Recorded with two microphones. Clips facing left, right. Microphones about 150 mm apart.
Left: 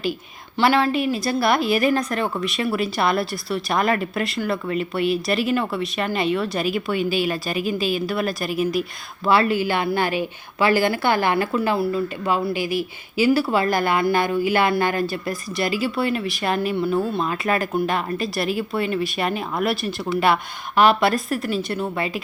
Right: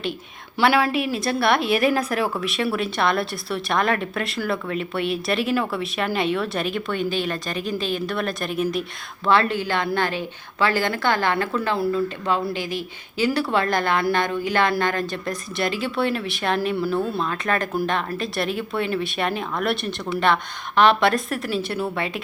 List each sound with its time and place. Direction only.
0.6 s a woman's voice: 5° right (ahead or behind)